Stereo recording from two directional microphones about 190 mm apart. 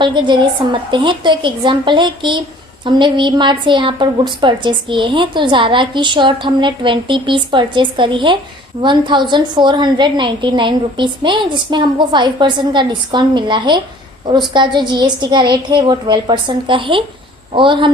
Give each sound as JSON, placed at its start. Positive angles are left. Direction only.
{"t": 0.0, "sound": "a woman's voice", "side_deg": -25}